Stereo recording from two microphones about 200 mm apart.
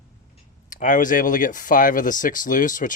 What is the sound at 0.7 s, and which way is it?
Speech, 40° left (ahead or behind).